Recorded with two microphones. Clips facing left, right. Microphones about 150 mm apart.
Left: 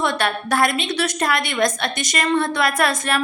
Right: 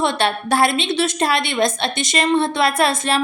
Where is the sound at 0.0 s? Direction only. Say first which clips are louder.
Right 2 dB; 25° right (ahead or behind).